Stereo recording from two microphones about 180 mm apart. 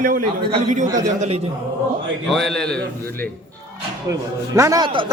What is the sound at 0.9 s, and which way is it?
Speech, 20° right (ahead or behind).